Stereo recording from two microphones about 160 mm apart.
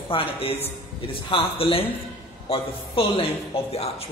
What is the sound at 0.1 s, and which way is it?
Speech, 35° left (ahead or behind).